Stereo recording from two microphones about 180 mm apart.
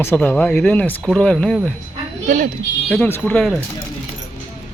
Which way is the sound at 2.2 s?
50° right (ahead or behind).